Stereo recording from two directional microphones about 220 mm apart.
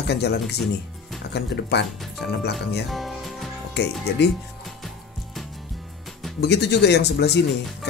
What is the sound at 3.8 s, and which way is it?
Speech, 50° left (ahead or behind).